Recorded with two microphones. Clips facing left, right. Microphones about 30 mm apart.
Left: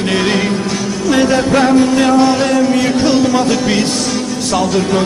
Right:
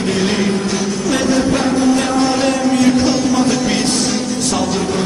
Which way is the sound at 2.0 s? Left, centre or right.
Centre.